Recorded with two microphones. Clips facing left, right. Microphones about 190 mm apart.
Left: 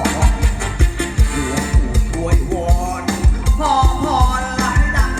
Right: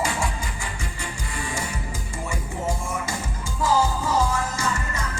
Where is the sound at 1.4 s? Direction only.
70° left (ahead or behind).